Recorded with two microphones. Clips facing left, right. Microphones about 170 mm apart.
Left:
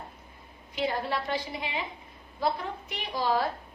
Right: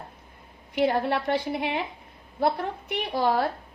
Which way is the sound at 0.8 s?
65° right (ahead or behind).